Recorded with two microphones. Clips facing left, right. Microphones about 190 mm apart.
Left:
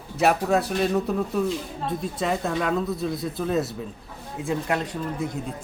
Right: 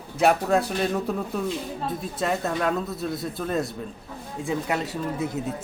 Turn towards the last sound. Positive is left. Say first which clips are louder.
# right 1 dB
turn(degrees=0)  # may be behind; listen again after turning